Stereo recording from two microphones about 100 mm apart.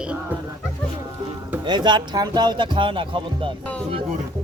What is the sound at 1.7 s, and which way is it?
Speech, 50° right (ahead or behind).